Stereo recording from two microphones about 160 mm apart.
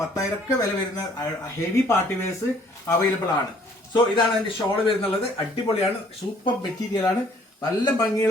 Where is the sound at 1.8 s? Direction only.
15° left (ahead or behind).